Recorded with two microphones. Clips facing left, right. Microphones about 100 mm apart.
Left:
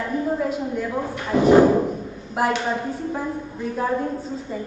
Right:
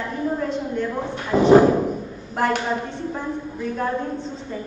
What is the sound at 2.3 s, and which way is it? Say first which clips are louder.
A woman's voice: even; 5° left (ahead or behind).